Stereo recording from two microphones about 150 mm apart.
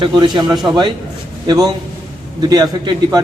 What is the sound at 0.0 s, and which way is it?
Speech, 30° right (ahead or behind).